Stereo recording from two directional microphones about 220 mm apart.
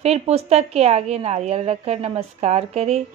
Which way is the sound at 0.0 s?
30° right (ahead or behind).